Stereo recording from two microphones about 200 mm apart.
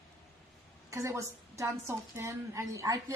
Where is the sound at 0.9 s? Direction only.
15° right (ahead or behind).